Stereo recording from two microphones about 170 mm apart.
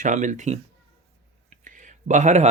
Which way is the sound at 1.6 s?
45° right (ahead or behind).